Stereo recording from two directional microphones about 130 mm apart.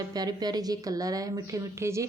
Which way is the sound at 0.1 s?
30° right (ahead or behind).